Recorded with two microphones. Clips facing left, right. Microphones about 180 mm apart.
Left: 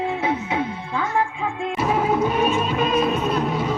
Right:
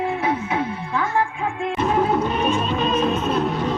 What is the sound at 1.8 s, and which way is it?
Music, 10° left (ahead or behind).